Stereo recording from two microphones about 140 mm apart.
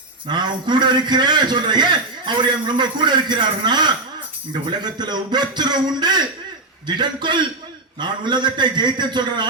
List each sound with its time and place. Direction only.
0.3 s a man's voice: 30° right (ahead or behind)